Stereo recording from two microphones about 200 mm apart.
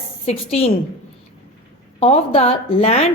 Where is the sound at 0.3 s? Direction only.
30° left (ahead or behind).